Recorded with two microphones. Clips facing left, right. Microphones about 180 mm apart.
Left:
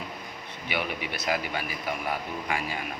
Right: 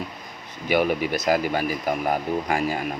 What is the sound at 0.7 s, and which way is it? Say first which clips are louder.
A man's voice: right 11 dB; 45° right (ahead or behind).